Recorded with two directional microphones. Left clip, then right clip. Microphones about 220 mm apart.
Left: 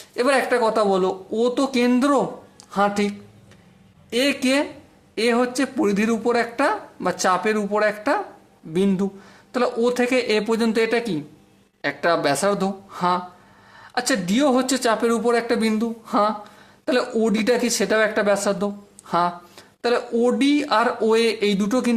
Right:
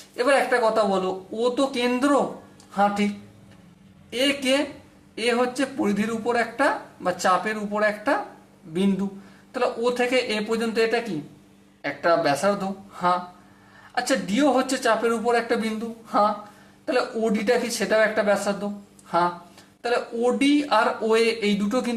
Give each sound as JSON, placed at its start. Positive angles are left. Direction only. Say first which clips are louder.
{"t": 0.2, "sound": "speech", "louder": "left 1 dB", "side_deg": 40}
{"t": 4.1, "sound": "speech", "louder": "left 2 dB", "side_deg": 45}
{"t": 19.8, "sound": "speech", "louder": "left 3 dB", "side_deg": 45}